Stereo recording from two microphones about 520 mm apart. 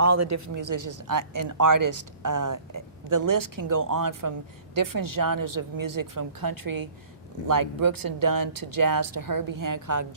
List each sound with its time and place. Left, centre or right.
0.0 s speech: right